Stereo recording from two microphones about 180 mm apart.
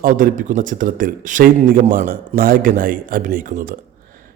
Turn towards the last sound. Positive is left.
turn(degrees=-50)  # may be behind; listen again after turning